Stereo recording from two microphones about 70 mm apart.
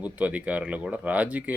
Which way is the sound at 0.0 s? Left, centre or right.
Centre.